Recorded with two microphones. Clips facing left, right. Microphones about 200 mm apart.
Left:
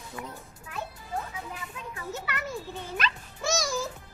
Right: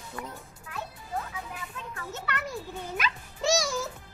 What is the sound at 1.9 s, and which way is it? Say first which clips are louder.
Speech: even; 10° left (ahead or behind).